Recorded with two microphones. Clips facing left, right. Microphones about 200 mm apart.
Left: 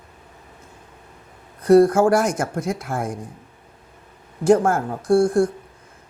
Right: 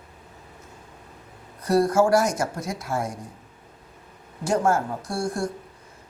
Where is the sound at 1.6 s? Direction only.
55° left (ahead or behind).